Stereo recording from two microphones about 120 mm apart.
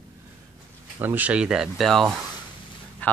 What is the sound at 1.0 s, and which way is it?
Speech, 15° right (ahead or behind).